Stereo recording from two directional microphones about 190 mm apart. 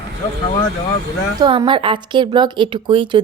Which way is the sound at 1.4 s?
25° right (ahead or behind).